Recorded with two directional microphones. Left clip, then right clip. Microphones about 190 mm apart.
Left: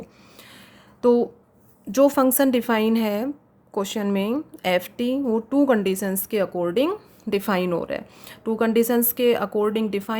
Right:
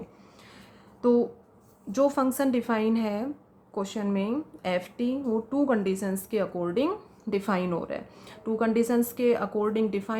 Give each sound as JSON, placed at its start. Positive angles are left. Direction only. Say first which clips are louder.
{"t": 1.0, "sound": "a woman's voice", "louder": "left 5 dB", "side_deg": 50}